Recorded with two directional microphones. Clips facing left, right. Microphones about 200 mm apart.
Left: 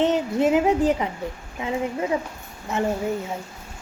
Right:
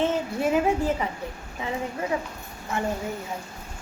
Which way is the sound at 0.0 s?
20° left (ahead or behind).